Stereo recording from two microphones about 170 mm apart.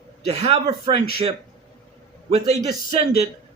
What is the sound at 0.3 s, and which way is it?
Speech, 35° right (ahead or behind).